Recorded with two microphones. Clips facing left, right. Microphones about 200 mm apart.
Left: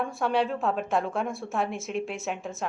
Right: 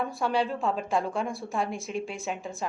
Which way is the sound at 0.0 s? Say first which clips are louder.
Left 1 dB; centre (ahead or behind).